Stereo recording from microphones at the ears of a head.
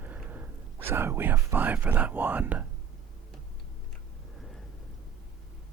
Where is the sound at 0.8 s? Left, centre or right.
Right.